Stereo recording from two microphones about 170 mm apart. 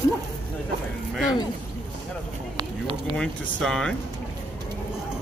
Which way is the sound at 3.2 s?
5° left (ahead or behind).